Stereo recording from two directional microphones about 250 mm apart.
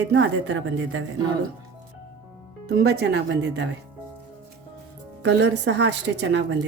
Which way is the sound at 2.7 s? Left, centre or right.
Right.